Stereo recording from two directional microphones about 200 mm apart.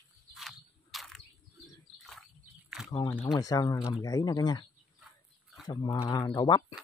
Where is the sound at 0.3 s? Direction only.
Centre (ahead or behind).